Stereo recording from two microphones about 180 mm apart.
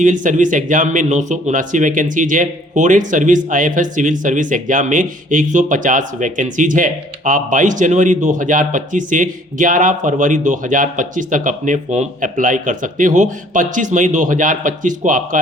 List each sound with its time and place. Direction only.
0.0 s speech: 45° right (ahead or behind)